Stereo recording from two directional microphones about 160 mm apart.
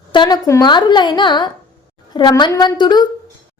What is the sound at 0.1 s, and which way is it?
A woman's voice, 25° left (ahead or behind).